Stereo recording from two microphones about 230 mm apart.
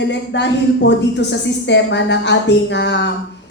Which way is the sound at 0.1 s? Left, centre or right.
Left.